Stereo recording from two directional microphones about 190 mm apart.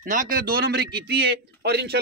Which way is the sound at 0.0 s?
45° right (ahead or behind).